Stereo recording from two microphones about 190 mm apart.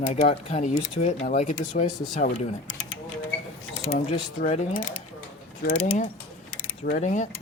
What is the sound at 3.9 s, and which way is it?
Speech, 35° left (ahead or behind).